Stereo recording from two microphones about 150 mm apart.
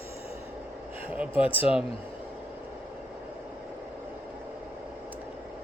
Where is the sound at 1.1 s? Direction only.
10° right (ahead or behind).